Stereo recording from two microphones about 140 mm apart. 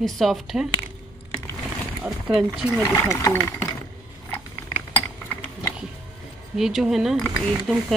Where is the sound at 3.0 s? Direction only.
20° left (ahead or behind).